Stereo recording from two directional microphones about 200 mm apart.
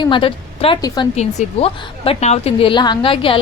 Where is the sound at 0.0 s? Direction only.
25° left (ahead or behind).